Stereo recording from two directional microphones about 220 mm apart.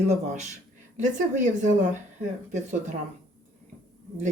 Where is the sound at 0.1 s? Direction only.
30° right (ahead or behind).